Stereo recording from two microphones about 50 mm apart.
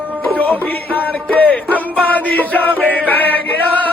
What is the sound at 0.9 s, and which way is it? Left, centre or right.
Music, left.